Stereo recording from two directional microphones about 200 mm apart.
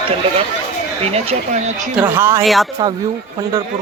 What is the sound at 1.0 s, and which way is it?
Speech, 30° right (ahead or behind).